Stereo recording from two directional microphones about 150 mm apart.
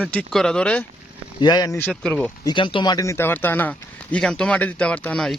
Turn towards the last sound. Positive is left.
turn(degrees=5)  # may be behind; listen again after turning